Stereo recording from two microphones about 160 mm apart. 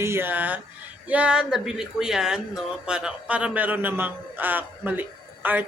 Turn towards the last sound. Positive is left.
turn(degrees=-10)  # may be behind; listen again after turning